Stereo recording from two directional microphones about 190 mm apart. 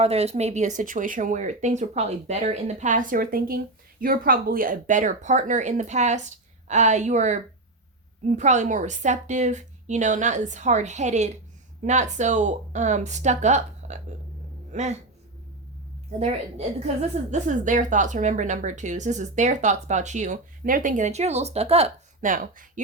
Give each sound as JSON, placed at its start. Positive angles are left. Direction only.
{"t": 0.0, "sound": "a woman's voice", "side_deg": -35}
{"t": 16.2, "sound": "a woman's voice", "side_deg": -35}
{"t": 22.3, "sound": "speech", "side_deg": -45}